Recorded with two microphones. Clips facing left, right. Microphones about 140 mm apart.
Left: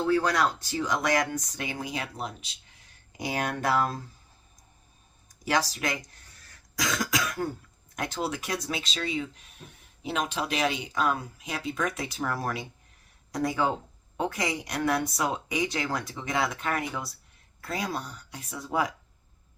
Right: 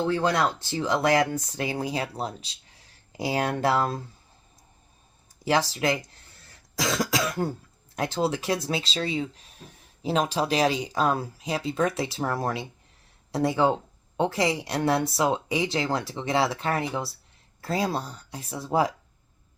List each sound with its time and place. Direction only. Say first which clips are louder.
0.0 s speech: right 1 dB; 25° right (ahead or behind)
5.5 s speech: right 4 dB; 30° right (ahead or behind)
6.7 s cough: right 3 dB; 30° right (ahead or behind)
7.9 s speech: right 5 dB; 30° right (ahead or behind)